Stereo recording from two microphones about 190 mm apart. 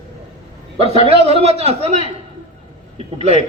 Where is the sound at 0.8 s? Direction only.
30° right (ahead or behind).